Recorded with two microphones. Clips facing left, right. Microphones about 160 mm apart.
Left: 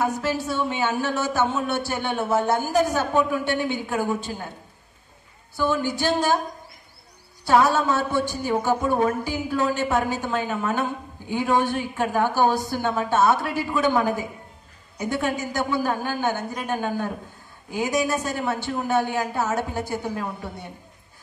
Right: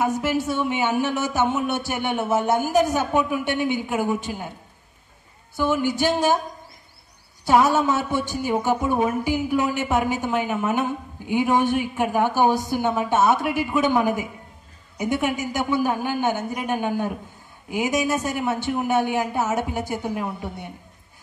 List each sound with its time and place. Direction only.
0.0 s a woman's voice: 15° right (ahead or behind)
5.6 s a woman's voice: 15° right (ahead or behind)
7.4 s a woman's voice: 15° right (ahead or behind)